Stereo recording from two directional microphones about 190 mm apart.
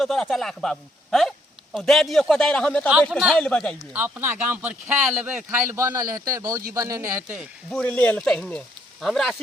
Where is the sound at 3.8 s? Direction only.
10° right (ahead or behind).